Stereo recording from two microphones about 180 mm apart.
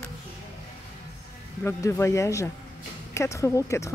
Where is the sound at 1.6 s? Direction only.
15° left (ahead or behind).